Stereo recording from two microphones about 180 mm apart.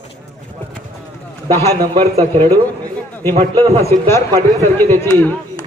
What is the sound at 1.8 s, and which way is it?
Speech, 20° right (ahead or behind).